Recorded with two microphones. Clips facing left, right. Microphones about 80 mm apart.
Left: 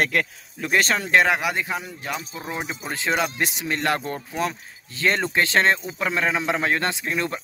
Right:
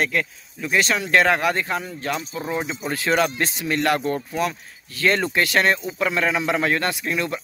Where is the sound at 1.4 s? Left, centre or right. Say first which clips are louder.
Right 3 dB; centre.